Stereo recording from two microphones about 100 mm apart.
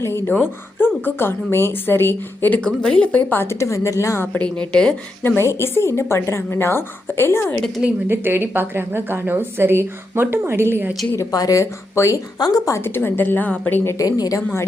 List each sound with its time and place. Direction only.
0.0 s a woman's voice: 25° left (ahead or behind)
4.3 s speech: 10° left (ahead or behind)
5.2 s a woman's voice: 25° left (ahead or behind)
7.8 s speech: 20° right (ahead or behind)
11.3 s a woman's voice: 35° left (ahead or behind); by 13.9 s 20° left (ahead or behind)
14.0 s speech: 35° left (ahead or behind)